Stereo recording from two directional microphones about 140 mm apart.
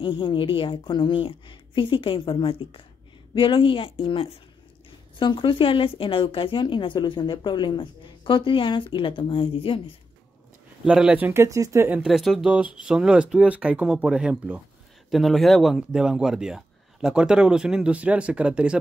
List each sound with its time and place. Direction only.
0.0 s speech: 35° left (ahead or behind)
10.9 s speech: 5° right (ahead or behind)
12.0 s speech: centre (ahead or behind)